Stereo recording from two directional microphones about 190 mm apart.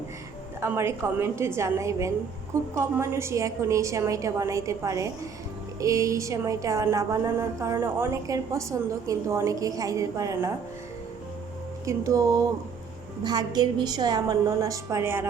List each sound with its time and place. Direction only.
0.6 s a woman's voice: 15° right (ahead or behind)
11.9 s a woman's voice: 15° right (ahead or behind)